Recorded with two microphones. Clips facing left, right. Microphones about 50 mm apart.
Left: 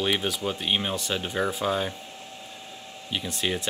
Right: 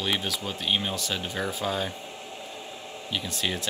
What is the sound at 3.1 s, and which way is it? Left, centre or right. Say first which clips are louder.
Speech: left 2 dB; centre.